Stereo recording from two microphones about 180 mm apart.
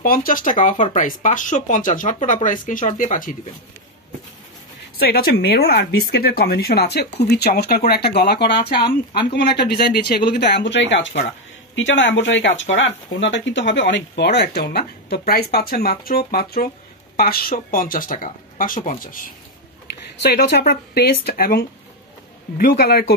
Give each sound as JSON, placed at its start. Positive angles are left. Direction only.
{"t": 0.0, "sound": "speech", "side_deg": 50}
{"t": 4.9, "sound": "speech", "side_deg": 60}
{"t": 19.9, "sound": "speech", "side_deg": 65}